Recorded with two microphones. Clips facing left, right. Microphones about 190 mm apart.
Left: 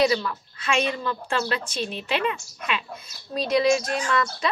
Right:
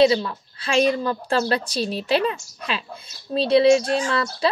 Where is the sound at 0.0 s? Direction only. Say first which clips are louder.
Right 5 dB; 30° right (ahead or behind).